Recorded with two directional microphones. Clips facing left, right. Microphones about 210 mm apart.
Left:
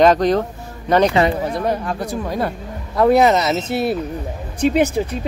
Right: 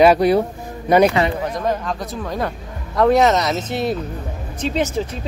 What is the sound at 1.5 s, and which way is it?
Speech, 10° left (ahead or behind).